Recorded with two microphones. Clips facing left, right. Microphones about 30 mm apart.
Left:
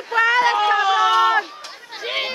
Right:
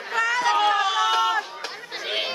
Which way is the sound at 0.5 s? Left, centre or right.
Centre.